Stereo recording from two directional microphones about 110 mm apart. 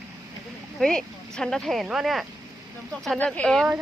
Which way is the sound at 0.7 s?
5° left (ahead or behind).